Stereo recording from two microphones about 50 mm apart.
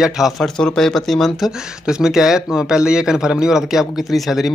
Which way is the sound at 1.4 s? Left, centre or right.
Centre.